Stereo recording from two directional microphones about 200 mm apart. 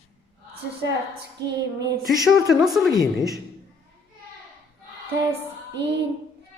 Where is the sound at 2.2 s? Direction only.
Centre (ahead or behind).